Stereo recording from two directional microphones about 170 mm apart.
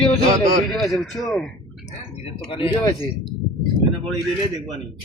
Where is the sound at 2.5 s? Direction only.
30° left (ahead or behind).